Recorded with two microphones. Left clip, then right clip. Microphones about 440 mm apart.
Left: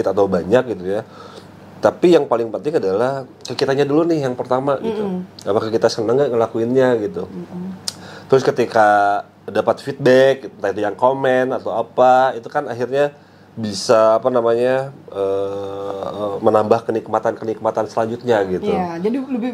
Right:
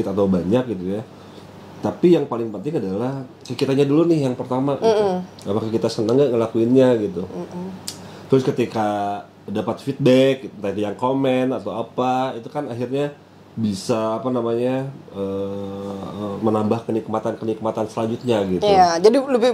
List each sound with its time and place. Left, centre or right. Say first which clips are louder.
0.0 s speech: left 4 dB; left
1.8 s speech: left 4 dB; left
7.8 s speech: left 5 dB; left
18.6 s speech: right 7 dB; right